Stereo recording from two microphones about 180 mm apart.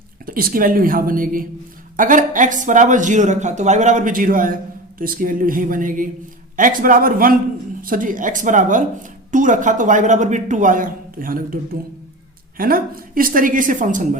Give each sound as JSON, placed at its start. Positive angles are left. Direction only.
{"t": 0.3, "sound": "a woman's voice", "side_deg": -55}